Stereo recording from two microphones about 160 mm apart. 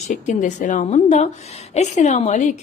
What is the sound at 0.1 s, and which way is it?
A woman's voice, 50° left (ahead or behind).